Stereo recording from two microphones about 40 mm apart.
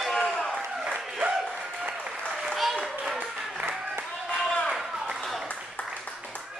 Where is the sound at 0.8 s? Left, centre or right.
Right.